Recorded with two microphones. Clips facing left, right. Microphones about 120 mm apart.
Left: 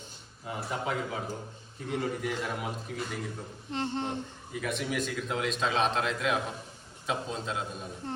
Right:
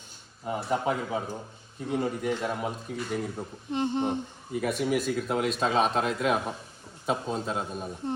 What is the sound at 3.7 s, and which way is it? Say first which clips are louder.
Speech: right 5 dB; 15° right (ahead or behind).